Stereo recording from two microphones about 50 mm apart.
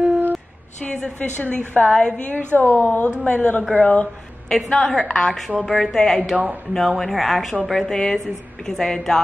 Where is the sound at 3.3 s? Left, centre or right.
Left.